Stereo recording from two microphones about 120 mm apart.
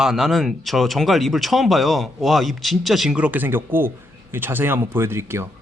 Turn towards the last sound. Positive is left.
turn(degrees=-20)  # may be behind; listen again after turning